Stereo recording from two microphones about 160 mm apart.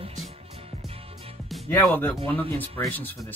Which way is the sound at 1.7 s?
15° left (ahead or behind).